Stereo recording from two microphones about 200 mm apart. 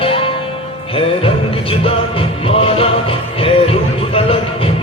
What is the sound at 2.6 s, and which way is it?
Music, 30° left (ahead or behind).